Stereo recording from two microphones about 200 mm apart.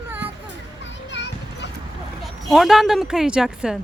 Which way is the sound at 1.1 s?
60° left (ahead or behind).